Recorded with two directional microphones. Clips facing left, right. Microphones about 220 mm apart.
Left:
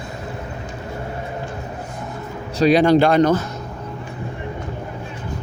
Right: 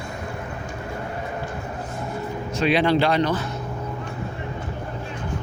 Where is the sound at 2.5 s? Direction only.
40° left (ahead or behind).